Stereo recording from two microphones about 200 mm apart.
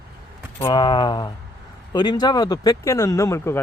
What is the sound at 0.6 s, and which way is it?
Speech, 20° left (ahead or behind).